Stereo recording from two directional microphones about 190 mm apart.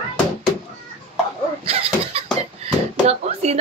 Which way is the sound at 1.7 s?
30° right (ahead or behind).